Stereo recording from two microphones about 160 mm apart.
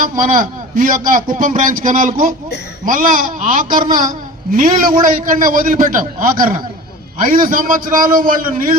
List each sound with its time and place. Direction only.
0.0 s a man's voice: 60° right (ahead or behind)